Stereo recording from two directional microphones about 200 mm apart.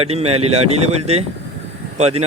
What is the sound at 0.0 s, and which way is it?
A man's voice, 30° right (ahead or behind).